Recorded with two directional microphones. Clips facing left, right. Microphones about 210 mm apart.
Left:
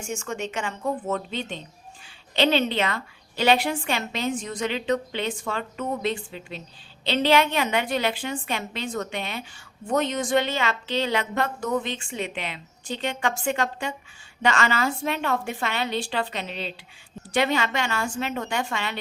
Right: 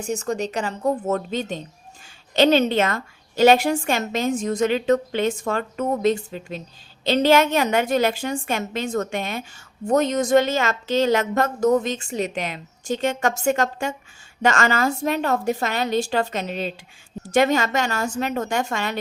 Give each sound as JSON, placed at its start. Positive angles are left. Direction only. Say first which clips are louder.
{"t": 0.0, "sound": "a woman's voice", "louder": "right 6 dB", "side_deg": -35}